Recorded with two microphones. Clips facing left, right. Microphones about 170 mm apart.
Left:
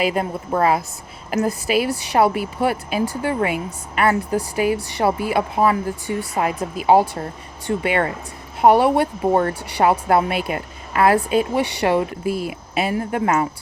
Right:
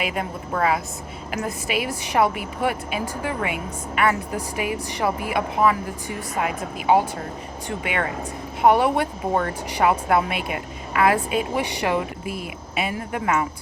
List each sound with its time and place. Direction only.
0.0 s speech: 35° left (ahead or behind)